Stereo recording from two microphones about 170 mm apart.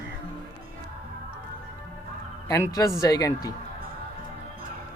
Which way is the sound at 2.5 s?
20° left (ahead or behind).